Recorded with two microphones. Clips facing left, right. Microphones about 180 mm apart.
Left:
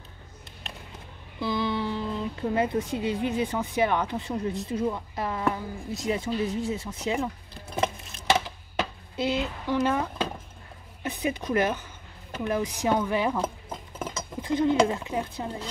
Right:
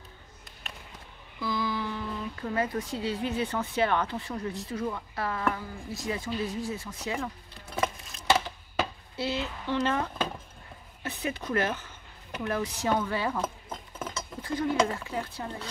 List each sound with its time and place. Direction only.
1.4 s a woman's voice: 25° left (ahead or behind)
9.1 s speech: 15° left (ahead or behind)
11.1 s speech: 15° left (ahead or behind)